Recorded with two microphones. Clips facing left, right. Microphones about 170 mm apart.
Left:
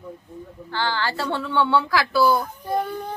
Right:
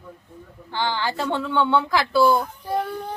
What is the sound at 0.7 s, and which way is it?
A woman's voice, 15° right (ahead or behind).